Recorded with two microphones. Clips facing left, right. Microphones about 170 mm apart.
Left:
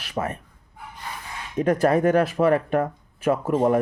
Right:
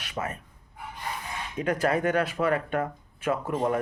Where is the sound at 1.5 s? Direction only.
40° left (ahead or behind).